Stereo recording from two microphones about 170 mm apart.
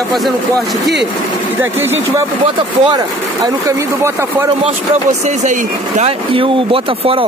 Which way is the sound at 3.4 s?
20° right (ahead or behind).